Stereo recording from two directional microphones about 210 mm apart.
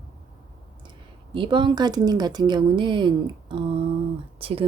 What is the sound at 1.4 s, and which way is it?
Speech, 20° right (ahead or behind).